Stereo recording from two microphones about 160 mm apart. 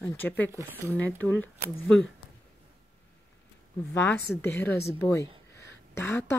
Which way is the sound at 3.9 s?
10° left (ahead or behind).